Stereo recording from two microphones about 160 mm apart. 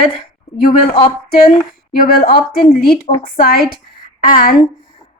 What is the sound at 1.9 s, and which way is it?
A woman's voice, 60° left (ahead or behind).